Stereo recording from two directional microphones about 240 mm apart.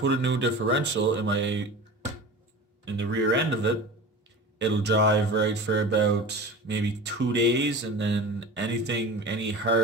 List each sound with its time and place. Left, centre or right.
0.0 s speech: right
2.8 s speech: right